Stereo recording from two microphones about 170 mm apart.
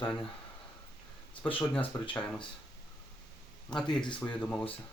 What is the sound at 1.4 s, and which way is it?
Speech, 30° left (ahead or behind).